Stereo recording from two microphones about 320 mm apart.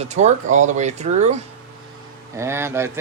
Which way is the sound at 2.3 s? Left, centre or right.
Centre.